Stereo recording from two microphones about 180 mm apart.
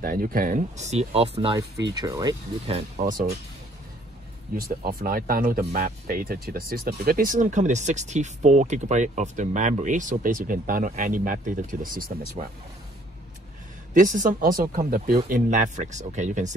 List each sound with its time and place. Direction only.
0.0 s speech: 50° right (ahead or behind); by 1.6 s 30° right (ahead or behind)
2.0 s speech: 20° right (ahead or behind)
3.0 s speech: 50° right (ahead or behind)
4.6 s speech: 55° right (ahead or behind)
13.9 s speech: 45° right (ahead or behind)